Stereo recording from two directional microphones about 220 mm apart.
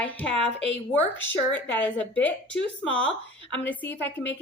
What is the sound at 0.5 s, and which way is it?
Speech, 55° left (ahead or behind).